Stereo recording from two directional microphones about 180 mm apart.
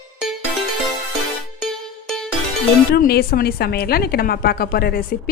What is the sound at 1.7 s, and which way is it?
Music, centre (ahead or behind).